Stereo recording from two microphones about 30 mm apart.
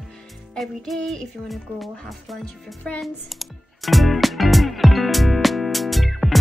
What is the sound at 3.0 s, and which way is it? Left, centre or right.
Music, centre.